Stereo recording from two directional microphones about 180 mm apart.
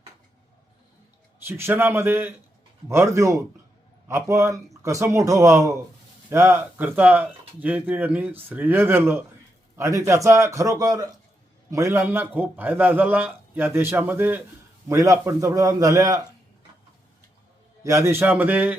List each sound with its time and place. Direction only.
1.5 s a man's voice: 10° right (ahead or behind)
17.8 s speech: 15° right (ahead or behind)